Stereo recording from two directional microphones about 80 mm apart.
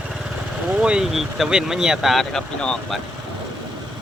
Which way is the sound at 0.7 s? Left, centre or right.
Centre.